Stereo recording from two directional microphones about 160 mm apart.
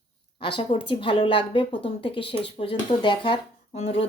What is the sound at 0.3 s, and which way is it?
Speech, 35° left (ahead or behind).